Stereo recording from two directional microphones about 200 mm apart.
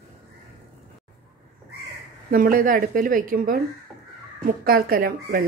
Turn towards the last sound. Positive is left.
turn(degrees=-45)  # may be behind; listen again after turning